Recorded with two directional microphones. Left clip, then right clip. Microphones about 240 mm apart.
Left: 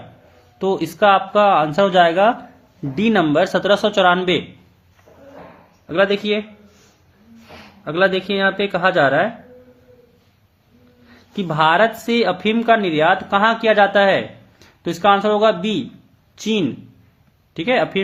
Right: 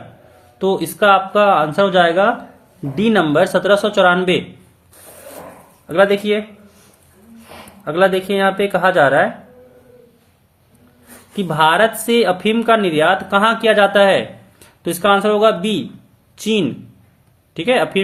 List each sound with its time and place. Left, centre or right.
0.6 s speech: left
5.9 s speech: centre
7.9 s speech: centre
11.3 s speech: centre